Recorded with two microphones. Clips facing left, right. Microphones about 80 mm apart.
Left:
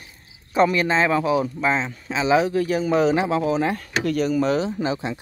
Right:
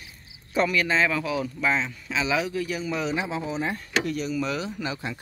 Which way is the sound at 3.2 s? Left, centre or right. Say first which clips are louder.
Left 8 dB; left.